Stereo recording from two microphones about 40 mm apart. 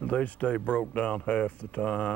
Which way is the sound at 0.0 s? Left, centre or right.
Left.